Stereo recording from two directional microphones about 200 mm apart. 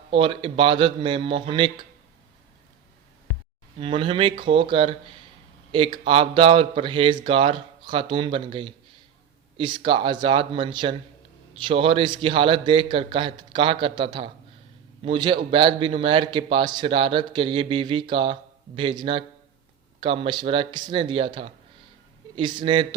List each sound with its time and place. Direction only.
0.1 s a man's voice: 25° right (ahead or behind)
3.8 s a man's voice: 25° right (ahead or behind)